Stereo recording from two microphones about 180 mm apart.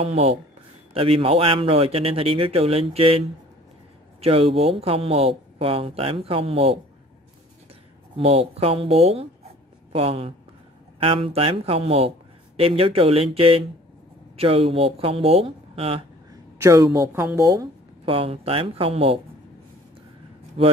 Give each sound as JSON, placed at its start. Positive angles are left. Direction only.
{"t": 0.0, "sound": "speech", "side_deg": -35}
{"t": 8.2, "sound": "speech", "side_deg": -35}
{"t": 16.5, "sound": "speech", "side_deg": -20}
{"t": 18.0, "sound": "speech", "side_deg": -30}
{"t": 20.6, "sound": "speech", "side_deg": -30}